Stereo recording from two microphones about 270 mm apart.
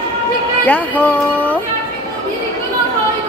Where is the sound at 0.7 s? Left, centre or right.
Centre.